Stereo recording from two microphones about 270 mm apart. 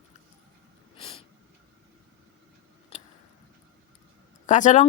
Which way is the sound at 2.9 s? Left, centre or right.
Left.